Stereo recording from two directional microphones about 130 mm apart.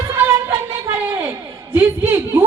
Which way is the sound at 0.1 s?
20° right (ahead or behind).